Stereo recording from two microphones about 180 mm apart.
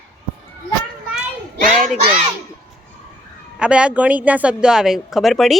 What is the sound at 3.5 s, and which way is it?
A woman's voice, 5° right (ahead or behind).